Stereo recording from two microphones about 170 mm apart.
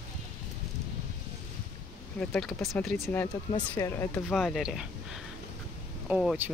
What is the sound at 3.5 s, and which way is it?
Speech, 20° left (ahead or behind).